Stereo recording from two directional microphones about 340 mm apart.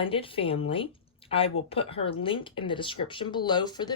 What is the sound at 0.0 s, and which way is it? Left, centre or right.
Speech, centre.